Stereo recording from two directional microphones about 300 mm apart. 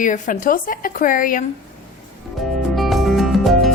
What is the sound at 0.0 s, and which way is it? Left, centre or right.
Speech, left.